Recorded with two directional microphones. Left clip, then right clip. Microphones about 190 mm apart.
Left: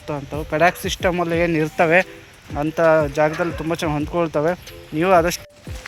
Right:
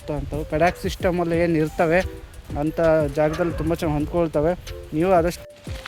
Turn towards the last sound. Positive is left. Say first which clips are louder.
# left 3 dB
turn(degrees=-5)  # may be behind; listen again after turning